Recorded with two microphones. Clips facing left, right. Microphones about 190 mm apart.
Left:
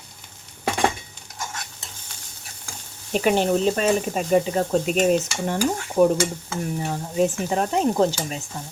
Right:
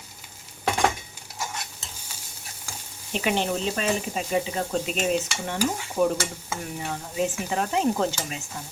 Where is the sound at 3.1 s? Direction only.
45° left (ahead or behind).